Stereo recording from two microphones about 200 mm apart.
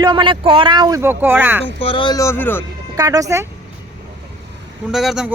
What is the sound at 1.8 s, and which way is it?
Speech, 25° left (ahead or behind).